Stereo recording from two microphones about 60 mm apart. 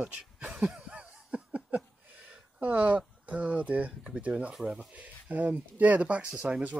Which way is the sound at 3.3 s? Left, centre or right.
Right.